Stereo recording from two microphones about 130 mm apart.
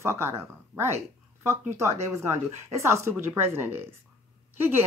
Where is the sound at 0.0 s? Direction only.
20° right (ahead or behind).